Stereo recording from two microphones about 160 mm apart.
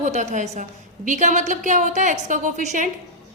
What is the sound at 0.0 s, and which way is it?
A woman's voice, 45° right (ahead or behind).